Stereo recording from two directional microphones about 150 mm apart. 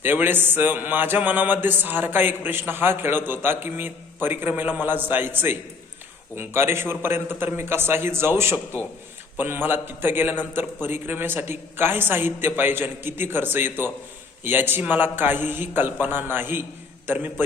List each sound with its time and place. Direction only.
0.0 s mantra: 15° right (ahead or behind)